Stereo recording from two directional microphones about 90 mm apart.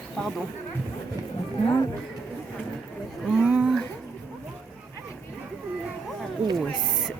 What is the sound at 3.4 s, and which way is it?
Speech, 15° right (ahead or behind).